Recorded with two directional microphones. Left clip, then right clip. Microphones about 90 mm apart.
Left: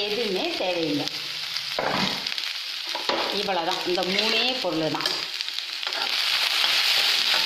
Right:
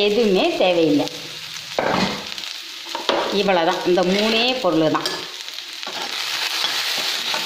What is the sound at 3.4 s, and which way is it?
Speech, 60° right (ahead or behind).